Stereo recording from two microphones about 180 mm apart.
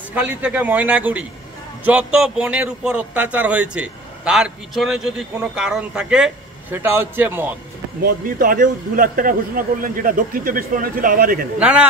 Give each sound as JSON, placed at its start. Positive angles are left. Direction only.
{"t": 0.1, "sound": "a man's voice", "side_deg": -5}
{"t": 8.0, "sound": "a man's voice", "side_deg": -50}
{"t": 11.6, "sound": "a man's voice", "side_deg": -5}